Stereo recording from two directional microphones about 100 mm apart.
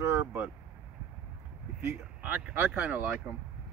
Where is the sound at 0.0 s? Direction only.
25° right (ahead or behind).